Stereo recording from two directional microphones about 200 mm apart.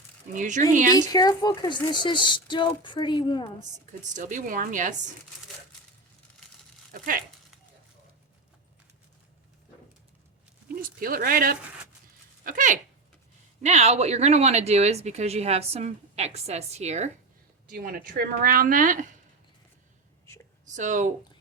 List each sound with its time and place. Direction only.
0.3 s speech: 40° right (ahead or behind)
0.9 s a woman's voice: 20° left (ahead or behind)
3.6 s speech: 35° right (ahead or behind)
6.9 s speech: 45° right (ahead or behind)
10.8 s speech: 45° right (ahead or behind)
17.7 s speech: 45° right (ahead or behind)
20.2 s whispering: 10° left (ahead or behind)
20.7 s speech: 40° right (ahead or behind)